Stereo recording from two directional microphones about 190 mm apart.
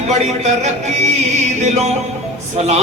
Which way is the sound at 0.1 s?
35° right (ahead or behind).